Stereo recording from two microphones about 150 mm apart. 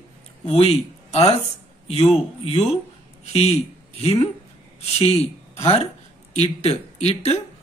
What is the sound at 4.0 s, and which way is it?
A man's voice, 40° left (ahead or behind).